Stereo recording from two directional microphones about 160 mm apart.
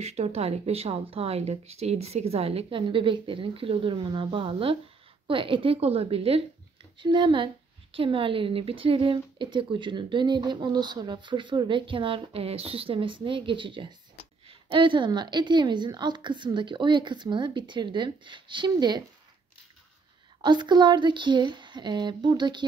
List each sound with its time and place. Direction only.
0.0 s a woman's voice: 40° right (ahead or behind); by 19.0 s 25° right (ahead or behind)
20.4 s a woman's voice: 30° right (ahead or behind)